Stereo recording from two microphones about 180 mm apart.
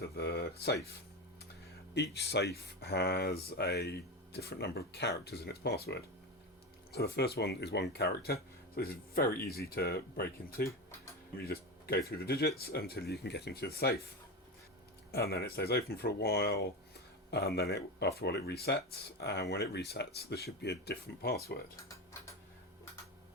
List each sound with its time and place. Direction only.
0.1 s speech: 65° left (ahead or behind)
2.0 s speech: 65° left (ahead or behind)
15.1 s speech: 60° left (ahead or behind)